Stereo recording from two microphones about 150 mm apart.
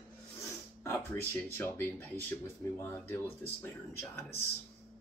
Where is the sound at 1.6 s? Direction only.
15° left (ahead or behind).